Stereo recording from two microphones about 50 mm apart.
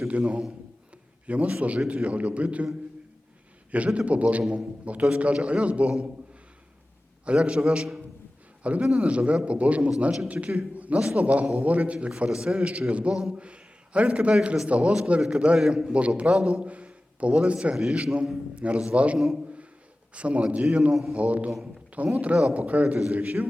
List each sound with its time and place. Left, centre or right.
0.1 s a man's voice: right
3.8 s a man's voice: right
7.3 s a man's voice: centre
10.8 s a sound: right
11.0 s a man's voice: right
14.4 s a man's voice: centre
14.7 s a man's voice: right
15.5 s a man's voice: centre
20.9 s a man's voice: centre
21.2 s a man's voice: right